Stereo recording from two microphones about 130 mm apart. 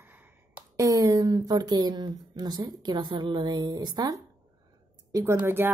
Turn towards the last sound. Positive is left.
turn(degrees=-15)  # may be behind; listen again after turning